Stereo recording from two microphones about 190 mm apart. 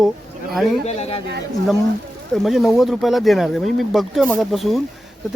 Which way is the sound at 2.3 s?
Centre (ahead or behind).